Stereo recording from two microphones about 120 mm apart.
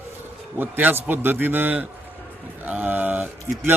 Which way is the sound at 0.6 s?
15° right (ahead or behind).